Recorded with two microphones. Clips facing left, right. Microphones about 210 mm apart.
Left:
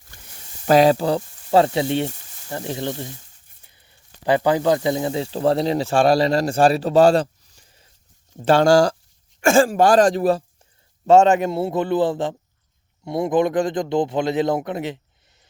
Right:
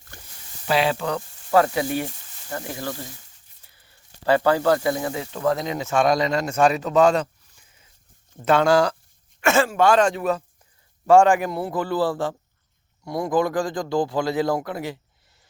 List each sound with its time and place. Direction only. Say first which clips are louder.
0.7 s a man's voice: left 7 dB; 40° left (ahead or behind)
11.0 s a man's voice: left 2 dB; 20° left (ahead or behind)